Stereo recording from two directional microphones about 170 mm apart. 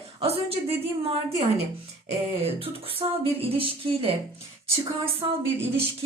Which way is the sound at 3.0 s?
30° right (ahead or behind).